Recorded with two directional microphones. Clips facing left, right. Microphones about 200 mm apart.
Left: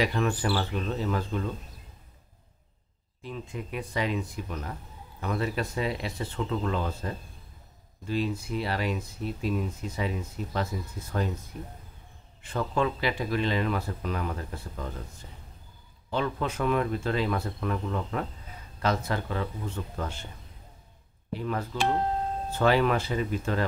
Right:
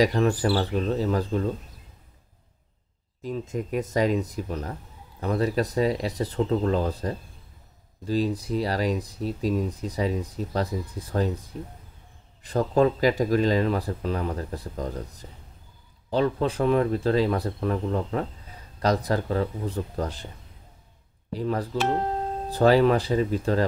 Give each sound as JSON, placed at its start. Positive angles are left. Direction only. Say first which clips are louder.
{"t": 0.0, "sound": "speech", "louder": "right 5 dB", "side_deg": -35}
{"t": 3.2, "sound": "speech", "louder": "right 7 dB", "side_deg": -40}
{"t": 16.1, "sound": "speech", "louder": "right 6 dB", "side_deg": -35}
{"t": 21.3, "sound": "speech", "louder": "right 4 dB", "side_deg": -35}